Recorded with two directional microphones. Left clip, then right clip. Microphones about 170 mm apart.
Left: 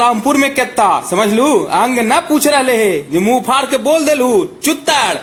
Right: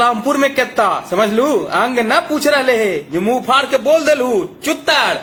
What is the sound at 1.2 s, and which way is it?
A man's voice, 30° left (ahead or behind).